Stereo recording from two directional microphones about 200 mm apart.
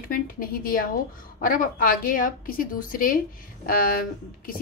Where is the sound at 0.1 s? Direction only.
45° left (ahead or behind).